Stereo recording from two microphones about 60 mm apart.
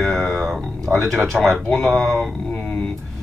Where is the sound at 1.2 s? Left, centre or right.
Centre.